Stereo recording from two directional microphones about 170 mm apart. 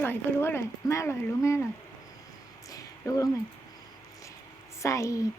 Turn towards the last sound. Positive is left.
turn(degrees=20)  # may be behind; listen again after turning